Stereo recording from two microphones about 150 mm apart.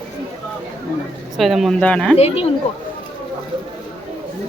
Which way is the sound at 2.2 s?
40° left (ahead or behind).